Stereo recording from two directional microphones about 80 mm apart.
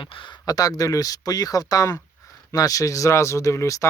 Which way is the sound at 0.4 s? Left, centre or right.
Left.